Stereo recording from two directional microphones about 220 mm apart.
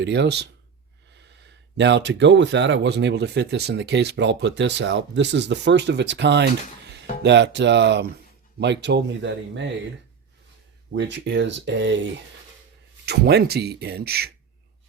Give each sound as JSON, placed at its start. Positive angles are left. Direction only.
{"t": 0.0, "sound": "speech", "side_deg": -50}
{"t": 1.7, "sound": "speech", "side_deg": -50}
{"t": 10.9, "sound": "speech", "side_deg": -55}
{"t": 13.1, "sound": "speech", "side_deg": -50}